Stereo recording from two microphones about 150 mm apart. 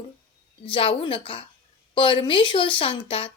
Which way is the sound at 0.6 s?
35° left (ahead or behind).